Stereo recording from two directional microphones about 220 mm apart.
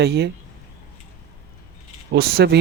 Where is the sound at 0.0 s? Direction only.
50° right (ahead or behind).